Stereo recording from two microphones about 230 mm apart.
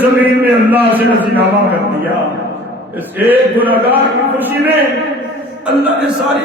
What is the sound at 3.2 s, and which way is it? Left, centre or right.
A man's voice, centre.